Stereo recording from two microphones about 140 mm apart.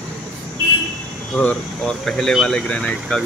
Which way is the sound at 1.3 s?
5° left (ahead or behind).